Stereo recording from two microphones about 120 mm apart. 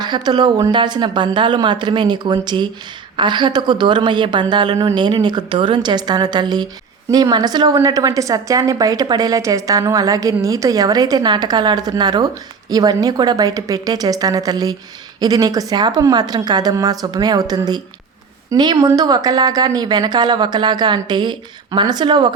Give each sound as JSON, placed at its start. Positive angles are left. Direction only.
{"t": 0.0, "sound": "a woman's voice", "side_deg": -35}